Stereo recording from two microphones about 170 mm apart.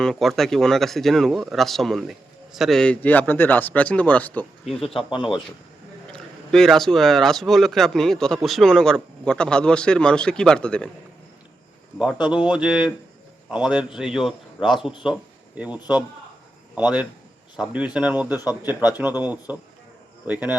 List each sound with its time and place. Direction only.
0.0 s speech: centre (ahead or behind)
4.6 s a man's voice: 35° left (ahead or behind)
6.1 s speech: 5° left (ahead or behind)
11.9 s speech: 5° right (ahead or behind)